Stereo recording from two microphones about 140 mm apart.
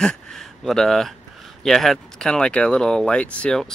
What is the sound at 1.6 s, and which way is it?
Speech, centre (ahead or behind).